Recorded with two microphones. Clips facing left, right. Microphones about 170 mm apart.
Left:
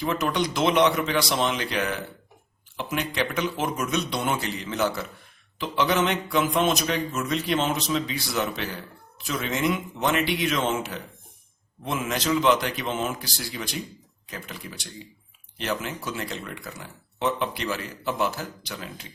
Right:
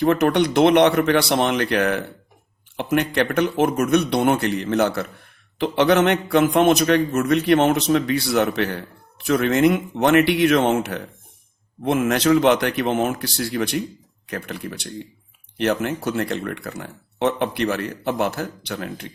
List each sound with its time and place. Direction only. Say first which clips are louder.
0.0 s speech: right 8 dB; 60° right (ahead or behind)